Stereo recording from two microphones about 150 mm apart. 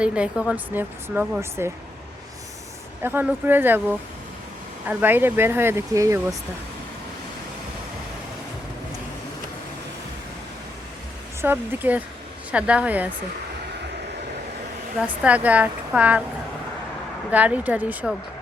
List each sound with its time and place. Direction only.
0.0 s speech: 5° right (ahead or behind)
3.0 s speech: 15° right (ahead or behind)
11.4 s speech: 15° right (ahead or behind)
15.0 s speech: 10° right (ahead or behind)
17.3 s speech: 10° right (ahead or behind)